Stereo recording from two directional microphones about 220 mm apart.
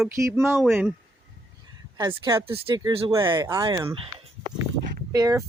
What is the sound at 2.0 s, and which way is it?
Speech, 15° right (ahead or behind).